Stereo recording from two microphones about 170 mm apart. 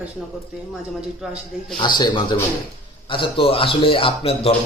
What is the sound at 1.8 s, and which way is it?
A man's voice, 25° left (ahead or behind).